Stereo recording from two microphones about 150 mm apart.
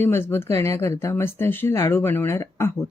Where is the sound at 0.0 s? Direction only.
15° left (ahead or behind).